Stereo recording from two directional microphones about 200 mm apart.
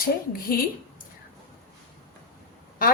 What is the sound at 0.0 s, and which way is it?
Speech, 45° left (ahead or behind).